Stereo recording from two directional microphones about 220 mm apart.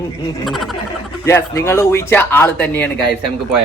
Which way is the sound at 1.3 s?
10° left (ahead or behind).